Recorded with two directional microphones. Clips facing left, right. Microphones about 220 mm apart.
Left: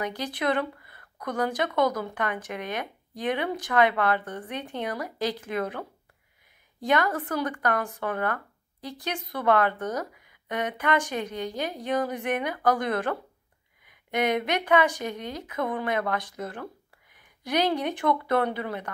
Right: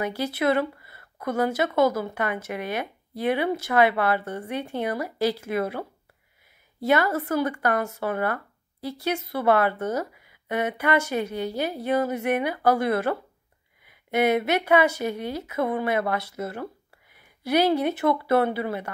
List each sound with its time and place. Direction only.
0.0 s a woman's voice: 5° right (ahead or behind)
6.8 s a woman's voice: 5° right (ahead or behind)